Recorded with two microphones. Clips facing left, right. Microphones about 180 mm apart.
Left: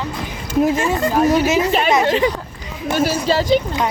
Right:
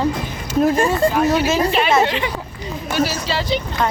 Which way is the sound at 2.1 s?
40° left (ahead or behind).